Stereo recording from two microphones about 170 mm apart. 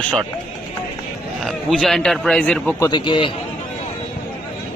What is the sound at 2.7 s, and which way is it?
Speech, 20° left (ahead or behind).